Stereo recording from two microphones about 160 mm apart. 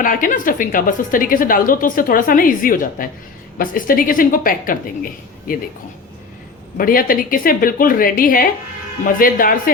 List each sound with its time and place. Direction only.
0.0 s a woman's voice: 55° left (ahead or behind)
6.7 s a woman's voice: 65° left (ahead or behind)